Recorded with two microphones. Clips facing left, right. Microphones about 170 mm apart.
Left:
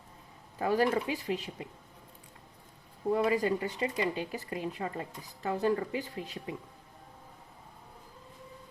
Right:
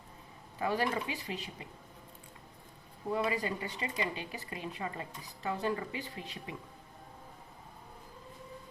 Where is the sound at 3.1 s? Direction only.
50° left (ahead or behind).